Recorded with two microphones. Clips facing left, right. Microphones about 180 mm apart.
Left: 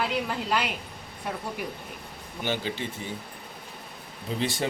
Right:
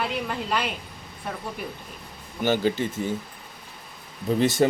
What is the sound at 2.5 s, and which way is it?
Speech, 45° right (ahead or behind).